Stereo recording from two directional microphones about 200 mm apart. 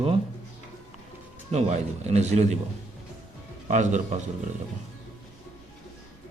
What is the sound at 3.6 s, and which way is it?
Speech, 40° right (ahead or behind).